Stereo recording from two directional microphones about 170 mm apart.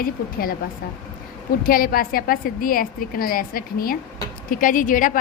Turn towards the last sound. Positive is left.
turn(degrees=50)  # may be behind; listen again after turning